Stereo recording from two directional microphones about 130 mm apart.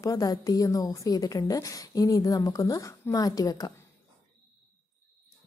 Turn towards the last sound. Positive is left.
turn(degrees=30)  # may be behind; listen again after turning